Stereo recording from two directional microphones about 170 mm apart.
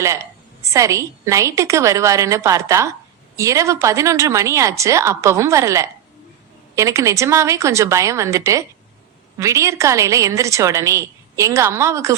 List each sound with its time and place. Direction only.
0.7 s a woman's voice: 20° right (ahead or behind)